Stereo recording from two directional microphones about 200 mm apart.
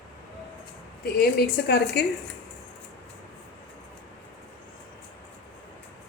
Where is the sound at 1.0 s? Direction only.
50° left (ahead or behind).